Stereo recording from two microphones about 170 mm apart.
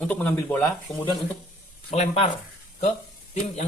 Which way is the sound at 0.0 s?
10° left (ahead or behind).